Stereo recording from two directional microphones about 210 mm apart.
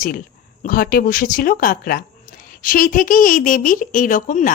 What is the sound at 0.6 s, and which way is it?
A woman's voice, 45° left (ahead or behind).